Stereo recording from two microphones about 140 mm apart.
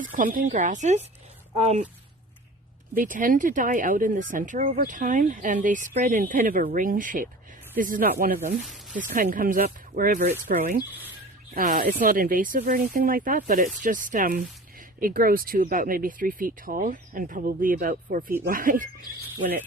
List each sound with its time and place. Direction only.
0.0 s speech: 70° right (ahead or behind); by 1.9 s 50° right (ahead or behind)
2.9 s speech: 75° right (ahead or behind)
8.6 s speech: centre (ahead or behind)
9.0 s speech: 75° right (ahead or behind)